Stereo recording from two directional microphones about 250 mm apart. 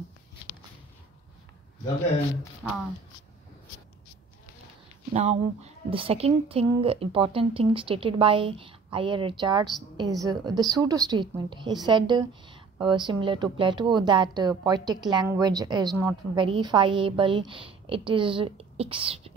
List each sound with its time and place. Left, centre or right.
2.6 s speech: centre
5.1 s a woman's voice: right